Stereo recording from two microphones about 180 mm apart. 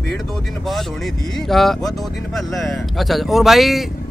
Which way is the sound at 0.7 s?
Centre (ahead or behind).